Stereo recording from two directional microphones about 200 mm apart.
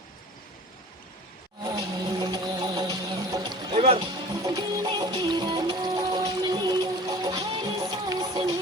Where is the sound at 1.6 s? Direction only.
20° right (ahead or behind).